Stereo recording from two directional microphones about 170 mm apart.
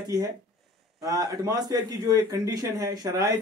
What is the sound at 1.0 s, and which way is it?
A man's voice, 20° right (ahead or behind).